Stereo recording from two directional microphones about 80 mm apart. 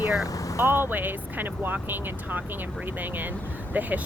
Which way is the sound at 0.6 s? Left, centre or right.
Right.